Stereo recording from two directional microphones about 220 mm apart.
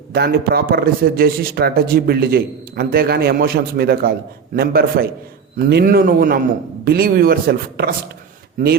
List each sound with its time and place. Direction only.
0.1 s a man's voice: 45° right (ahead or behind)